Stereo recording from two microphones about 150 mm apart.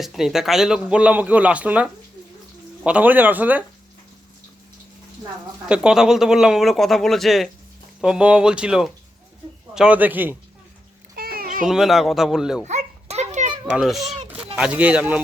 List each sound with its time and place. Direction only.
0.0 s a man's voice: centre (ahead or behind)
5.6 s a man's voice: 5° right (ahead or behind)
11.1 s a sound: 90° right
11.6 s a man's voice: centre (ahead or behind)
12.6 s a sound: 50° right (ahead or behind)
13.7 s a man's voice: centre (ahead or behind)